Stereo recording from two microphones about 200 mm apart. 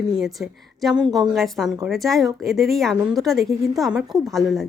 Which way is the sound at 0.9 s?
20° right (ahead or behind).